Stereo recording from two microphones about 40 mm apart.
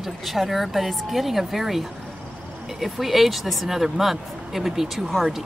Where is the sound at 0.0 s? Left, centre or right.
Centre.